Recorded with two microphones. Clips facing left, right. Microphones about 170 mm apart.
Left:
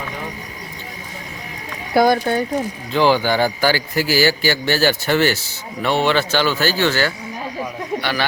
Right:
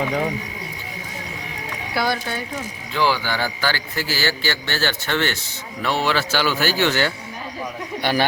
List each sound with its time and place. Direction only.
2.0 s speech: 45° left (ahead or behind)
2.9 s a man's voice: 20° left (ahead or behind); by 7.1 s 15° right (ahead or behind)